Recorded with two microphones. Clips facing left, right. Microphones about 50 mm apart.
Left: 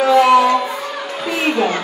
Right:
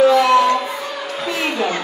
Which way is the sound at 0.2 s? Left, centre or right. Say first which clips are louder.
Left 2 dB; centre.